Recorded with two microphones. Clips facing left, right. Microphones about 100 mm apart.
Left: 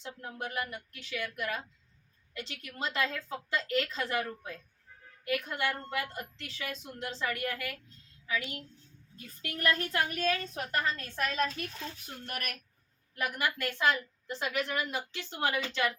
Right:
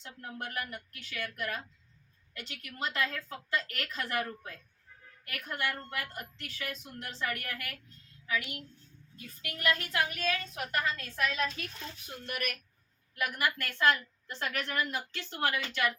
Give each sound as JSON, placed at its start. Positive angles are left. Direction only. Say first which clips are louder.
{"t": 0.0, "sound": "a woman's voice", "louder": "left 2 dB", "side_deg": 20}
{"t": 13.1, "sound": "a woman's voice", "louder": "even", "side_deg": 25}